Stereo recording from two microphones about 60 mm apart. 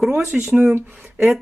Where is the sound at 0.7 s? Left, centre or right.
Right.